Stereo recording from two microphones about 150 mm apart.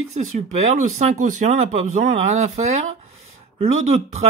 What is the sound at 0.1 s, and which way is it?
Speech, 50° right (ahead or behind).